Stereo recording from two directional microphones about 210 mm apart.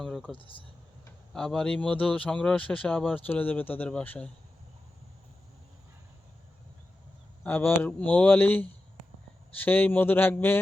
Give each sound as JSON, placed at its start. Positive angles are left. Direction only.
{"t": 0.0, "sound": "a sound", "side_deg": 0}
{"t": 0.3, "sound": "speech", "side_deg": 25}
{"t": 1.3, "sound": "speech", "side_deg": 5}
{"t": 7.4, "sound": "speech", "side_deg": 10}